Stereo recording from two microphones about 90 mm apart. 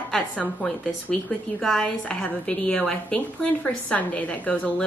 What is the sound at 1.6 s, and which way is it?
A woman's voice, 5° left (ahead or behind).